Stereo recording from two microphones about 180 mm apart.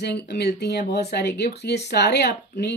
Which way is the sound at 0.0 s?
65° left (ahead or behind).